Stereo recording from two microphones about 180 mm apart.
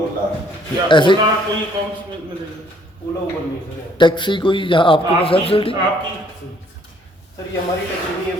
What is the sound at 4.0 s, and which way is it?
Speech, 25° left (ahead or behind).